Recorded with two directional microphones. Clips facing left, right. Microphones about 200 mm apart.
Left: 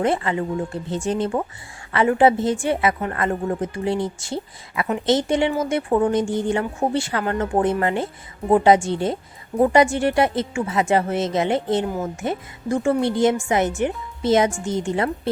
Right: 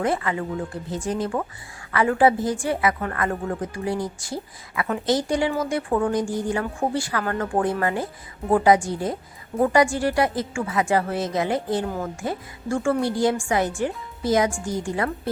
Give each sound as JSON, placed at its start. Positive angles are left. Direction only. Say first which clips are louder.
{"t": 0.0, "sound": "a woman's voice", "louder": "left 3 dB", "side_deg": 25}